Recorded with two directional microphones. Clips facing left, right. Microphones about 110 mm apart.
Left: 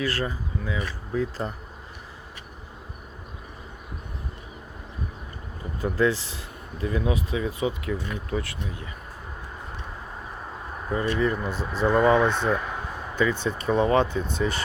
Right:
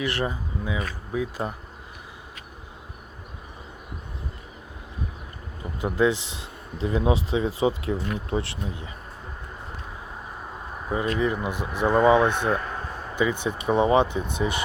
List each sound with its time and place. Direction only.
0.0 s speech: 20° right (ahead or behind)
5.8 s speech: 20° right (ahead or behind)
10.8 s speech: 15° right (ahead or behind)